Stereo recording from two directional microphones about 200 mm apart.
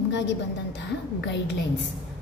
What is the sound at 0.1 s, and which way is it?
A woman's voice, 65° left (ahead or behind).